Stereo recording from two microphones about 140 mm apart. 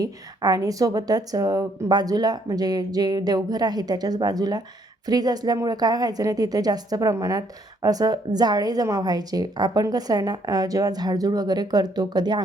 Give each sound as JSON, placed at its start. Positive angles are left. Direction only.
{"t": 0.0, "sound": "a woman's voice", "side_deg": -25}